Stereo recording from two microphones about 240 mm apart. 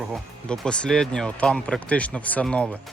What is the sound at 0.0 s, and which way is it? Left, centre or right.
Speech, centre.